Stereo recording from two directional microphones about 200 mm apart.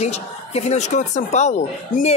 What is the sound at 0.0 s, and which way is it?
Speech, 35° left (ahead or behind).